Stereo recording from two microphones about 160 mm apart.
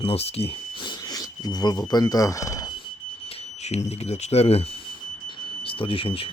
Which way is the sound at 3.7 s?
45° left (ahead or behind).